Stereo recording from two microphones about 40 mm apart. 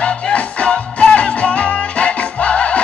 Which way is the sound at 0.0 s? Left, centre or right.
Left.